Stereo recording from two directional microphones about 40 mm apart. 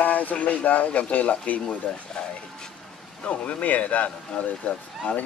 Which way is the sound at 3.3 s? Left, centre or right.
Left.